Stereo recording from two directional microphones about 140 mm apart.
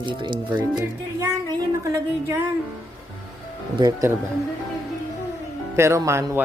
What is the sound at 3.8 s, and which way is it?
Speech, 25° right (ahead or behind).